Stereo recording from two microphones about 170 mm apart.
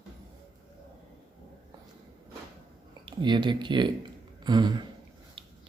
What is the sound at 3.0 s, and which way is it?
Speech, 25° right (ahead or behind).